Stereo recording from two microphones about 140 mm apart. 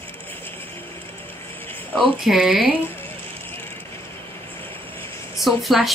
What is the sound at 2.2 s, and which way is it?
Speech, 5° right (ahead or behind).